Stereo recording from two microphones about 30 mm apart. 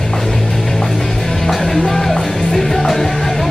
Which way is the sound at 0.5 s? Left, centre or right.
Centre.